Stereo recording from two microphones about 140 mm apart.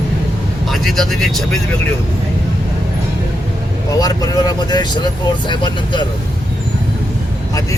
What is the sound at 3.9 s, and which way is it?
Speech, 25° left (ahead or behind).